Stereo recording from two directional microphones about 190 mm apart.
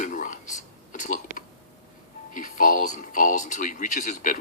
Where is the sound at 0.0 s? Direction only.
45° left (ahead or behind).